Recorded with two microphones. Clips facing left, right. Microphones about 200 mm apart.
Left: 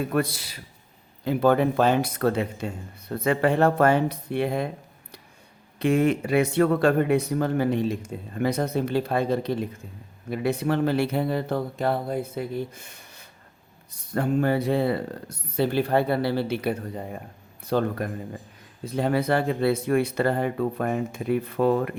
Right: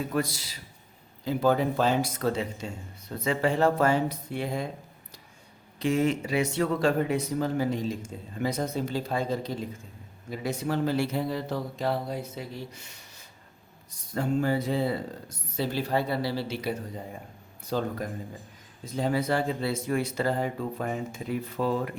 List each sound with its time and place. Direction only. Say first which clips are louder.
0.0 s speech: left 4 dB; 60° left (ahead or behind)
5.8 s speech: left 4 dB; 55° left (ahead or behind)